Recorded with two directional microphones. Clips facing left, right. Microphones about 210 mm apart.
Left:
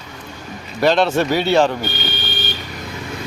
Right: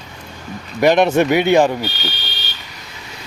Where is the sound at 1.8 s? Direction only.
50° left (ahead or behind).